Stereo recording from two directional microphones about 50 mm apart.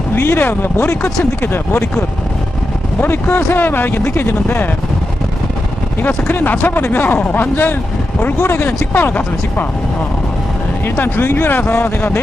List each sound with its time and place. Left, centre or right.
0.2 s speech: left
3.3 s speech: left
6.3 s speech: left
7.2 s speech: left
7.5 s speech: left
8.4 s speech: left
8.9 s speech: left
10.8 s speech: left